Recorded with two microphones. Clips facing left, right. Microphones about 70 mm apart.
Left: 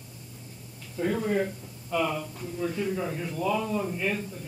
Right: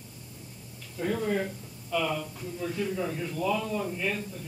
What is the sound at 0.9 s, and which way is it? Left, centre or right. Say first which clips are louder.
Speech: left 2 dB; centre.